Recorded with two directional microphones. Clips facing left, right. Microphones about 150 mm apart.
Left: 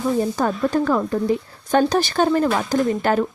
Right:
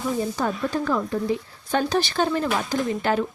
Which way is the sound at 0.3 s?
50° left (ahead or behind).